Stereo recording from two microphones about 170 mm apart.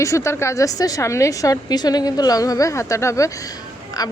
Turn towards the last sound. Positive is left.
turn(degrees=20)  # may be behind; listen again after turning